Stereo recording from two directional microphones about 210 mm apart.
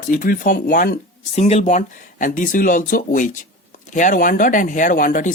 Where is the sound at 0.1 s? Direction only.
40° left (ahead or behind).